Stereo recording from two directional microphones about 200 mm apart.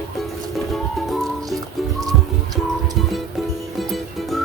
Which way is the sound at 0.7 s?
Centre (ahead or behind).